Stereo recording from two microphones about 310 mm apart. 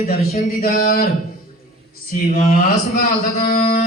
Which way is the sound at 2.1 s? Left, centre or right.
Left.